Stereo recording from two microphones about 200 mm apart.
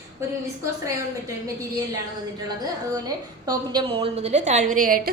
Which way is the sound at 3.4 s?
20° right (ahead or behind).